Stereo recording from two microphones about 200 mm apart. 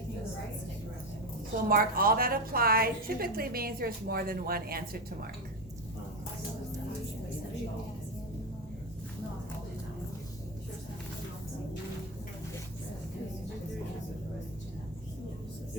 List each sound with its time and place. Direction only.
1.7 s a woman's voice: 45° right (ahead or behind)